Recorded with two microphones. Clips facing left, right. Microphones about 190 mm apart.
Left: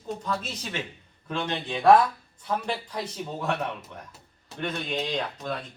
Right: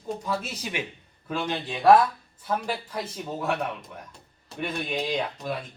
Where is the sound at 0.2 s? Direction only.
10° right (ahead or behind).